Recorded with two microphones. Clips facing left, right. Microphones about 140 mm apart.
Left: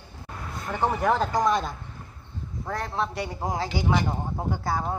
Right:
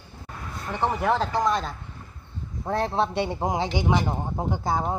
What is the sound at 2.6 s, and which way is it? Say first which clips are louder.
Speech: right 5 dB; 30° right (ahead or behind).